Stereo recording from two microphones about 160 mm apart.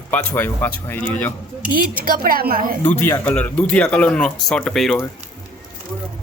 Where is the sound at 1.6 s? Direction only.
65° right (ahead or behind).